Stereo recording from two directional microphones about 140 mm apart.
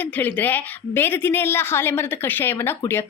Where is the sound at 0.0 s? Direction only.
10° left (ahead or behind).